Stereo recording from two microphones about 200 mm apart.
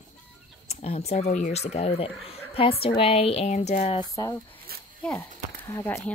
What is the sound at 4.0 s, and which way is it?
Speech, 20° left (ahead or behind).